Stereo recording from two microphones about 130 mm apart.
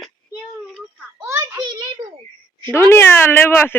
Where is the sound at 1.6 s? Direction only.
35° right (ahead or behind).